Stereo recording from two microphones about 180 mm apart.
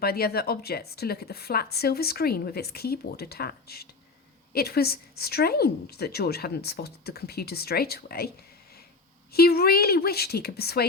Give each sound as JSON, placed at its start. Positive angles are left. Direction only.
{"t": 0.0, "sound": "a woman's voice", "side_deg": 60}
{"t": 9.3, "sound": "a woman's voice", "side_deg": 60}